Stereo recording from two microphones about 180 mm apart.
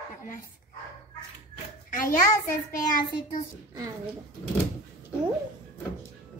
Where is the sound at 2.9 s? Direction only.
50° left (ahead or behind).